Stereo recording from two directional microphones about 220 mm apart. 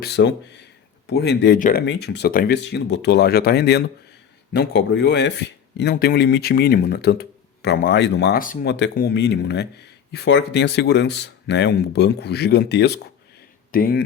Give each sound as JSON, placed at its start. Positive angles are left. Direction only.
{"t": 0.0, "sound": "speech", "side_deg": 50}
{"t": 1.8, "sound": "speech", "side_deg": 50}